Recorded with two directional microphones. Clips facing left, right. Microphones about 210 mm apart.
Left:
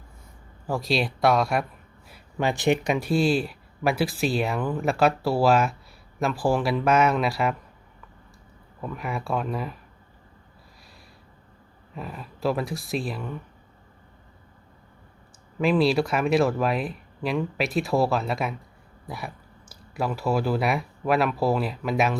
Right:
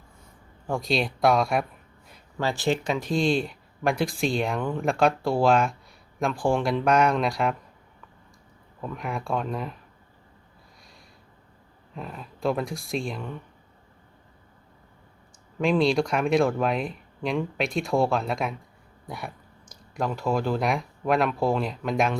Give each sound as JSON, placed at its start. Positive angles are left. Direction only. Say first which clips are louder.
{"t": 0.7, "sound": "speech", "louder": "even", "side_deg": 0}
{"t": 2.4, "sound": "speech", "louder": "left 3 dB", "side_deg": 15}
{"t": 8.8, "sound": "speech", "louder": "left 1 dB", "side_deg": 5}
{"t": 11.9, "sound": "speech", "louder": "left 1 dB", "side_deg": 5}
{"t": 15.5, "sound": "speech", "louder": "left 1 dB", "side_deg": 5}